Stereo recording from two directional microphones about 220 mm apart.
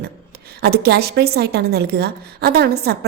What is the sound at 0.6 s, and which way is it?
A woman's voice, 45° right (ahead or behind).